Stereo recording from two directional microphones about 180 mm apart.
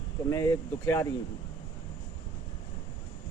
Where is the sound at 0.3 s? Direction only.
15° left (ahead or behind).